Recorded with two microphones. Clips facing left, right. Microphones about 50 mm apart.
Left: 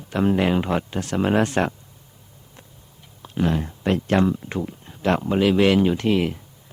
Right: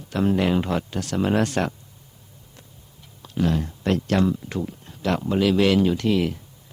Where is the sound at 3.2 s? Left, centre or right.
Left.